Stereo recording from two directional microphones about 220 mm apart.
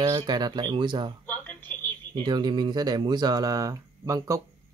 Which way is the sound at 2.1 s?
20° right (ahead or behind).